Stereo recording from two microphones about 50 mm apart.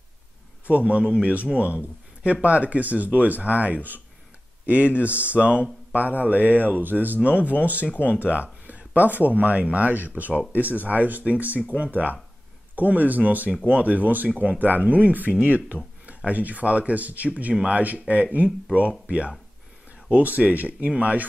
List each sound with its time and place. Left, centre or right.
0.7 s a man's voice: right
7.8 s speech: left
8.1 s a man's voice: right
15.4 s a sound: right
16.3 s a man's voice: right